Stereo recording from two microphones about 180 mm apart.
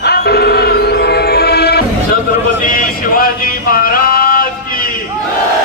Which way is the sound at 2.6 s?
50° left (ahead or behind).